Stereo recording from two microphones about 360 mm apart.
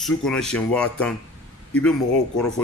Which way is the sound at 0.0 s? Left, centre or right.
Centre.